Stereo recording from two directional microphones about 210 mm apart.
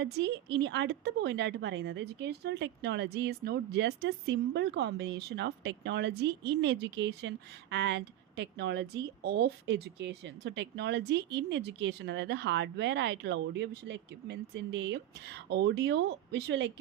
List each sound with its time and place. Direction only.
0.0 s a woman's voice: 55° right (ahead or behind)